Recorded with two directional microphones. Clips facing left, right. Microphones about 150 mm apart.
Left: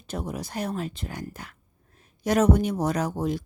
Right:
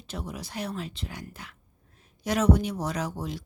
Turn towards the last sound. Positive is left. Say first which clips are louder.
# left 6 dB
turn(degrees=50)  # may be behind; listen again after turning